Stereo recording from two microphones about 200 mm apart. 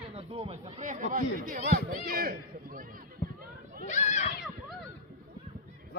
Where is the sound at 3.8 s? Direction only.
35° left (ahead or behind).